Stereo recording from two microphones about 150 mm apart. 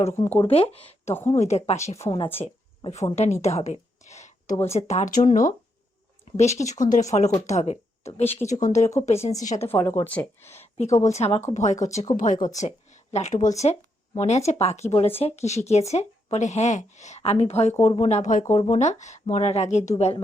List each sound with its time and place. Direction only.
0.4 s speech: 40° left (ahead or behind)
3.2 s a sound: 50° left (ahead or behind)
4.9 s speech: 55° left (ahead or behind)
6.3 s speech: 50° left (ahead or behind)
9.4 s speech: 55° left (ahead or behind)
9.6 s speech: 15° left (ahead or behind)
11.0 s speech: 45° left (ahead or behind)
12.5 s speech: 50° left (ahead or behind)